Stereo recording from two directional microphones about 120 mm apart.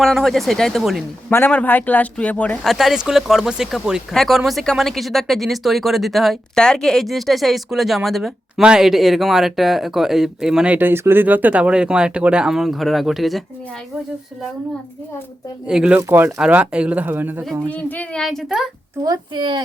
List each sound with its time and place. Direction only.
0.0 s speech: centre (ahead or behind)
1.3 s a man's voice: 15° left (ahead or behind)
2.6 s speech: centre (ahead or behind)
15.6 s speech: 10° right (ahead or behind)
16.0 s speech: 20° right (ahead or behind)
17.7 s speech: 15° left (ahead or behind)
19.0 s a woman's voice: 35° right (ahead or behind)